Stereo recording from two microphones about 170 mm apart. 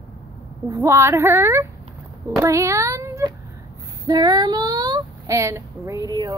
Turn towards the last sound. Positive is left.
turn(degrees=-25)  # may be behind; listen again after turning